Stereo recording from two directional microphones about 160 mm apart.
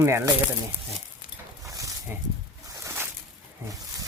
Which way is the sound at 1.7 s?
20° right (ahead or behind).